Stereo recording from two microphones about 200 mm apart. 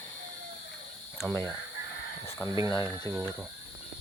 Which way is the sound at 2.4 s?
15° right (ahead or behind).